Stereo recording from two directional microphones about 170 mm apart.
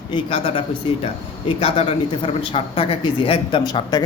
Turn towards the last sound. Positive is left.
turn(degrees=25)  # may be behind; listen again after turning